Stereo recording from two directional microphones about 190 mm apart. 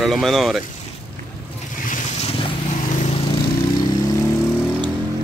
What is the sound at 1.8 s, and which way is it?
Boat, 40° left (ahead or behind).